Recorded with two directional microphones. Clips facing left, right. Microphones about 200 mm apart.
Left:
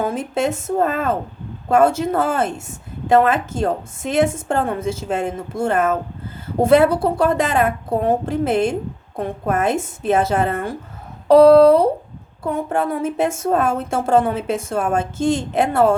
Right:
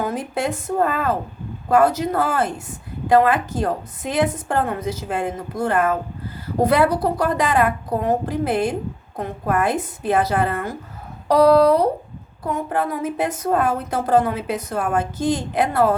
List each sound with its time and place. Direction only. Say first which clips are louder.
0.0 s a woman's voice: left 3 dB; 25° left (ahead or behind)